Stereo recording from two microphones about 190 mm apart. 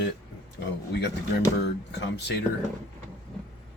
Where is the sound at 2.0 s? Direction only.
65° left (ahead or behind).